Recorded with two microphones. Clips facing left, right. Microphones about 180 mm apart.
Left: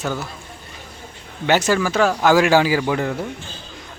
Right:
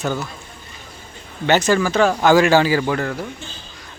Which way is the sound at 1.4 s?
10° left (ahead or behind).